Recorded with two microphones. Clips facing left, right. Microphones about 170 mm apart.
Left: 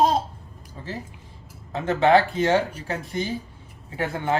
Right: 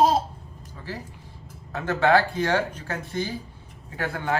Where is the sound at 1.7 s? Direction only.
20° left (ahead or behind).